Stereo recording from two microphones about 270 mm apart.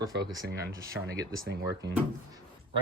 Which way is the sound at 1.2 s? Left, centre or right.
Right.